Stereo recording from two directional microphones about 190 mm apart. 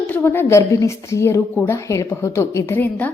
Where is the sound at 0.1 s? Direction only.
10° left (ahead or behind).